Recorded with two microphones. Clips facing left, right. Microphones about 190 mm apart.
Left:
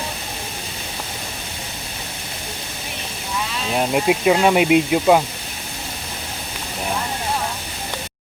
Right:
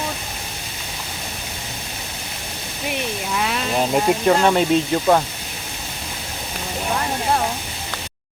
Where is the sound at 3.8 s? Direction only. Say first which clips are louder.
Even; 5° left (ahead or behind).